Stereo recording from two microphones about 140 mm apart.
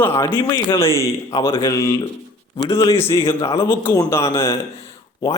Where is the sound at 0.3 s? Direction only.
30° left (ahead or behind).